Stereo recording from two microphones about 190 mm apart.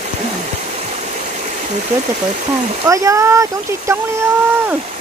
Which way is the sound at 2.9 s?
15° right (ahead or behind).